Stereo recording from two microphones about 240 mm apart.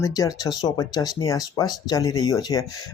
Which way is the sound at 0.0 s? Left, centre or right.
Centre.